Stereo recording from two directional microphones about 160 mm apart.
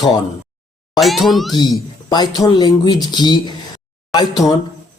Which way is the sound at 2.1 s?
25° left (ahead or behind).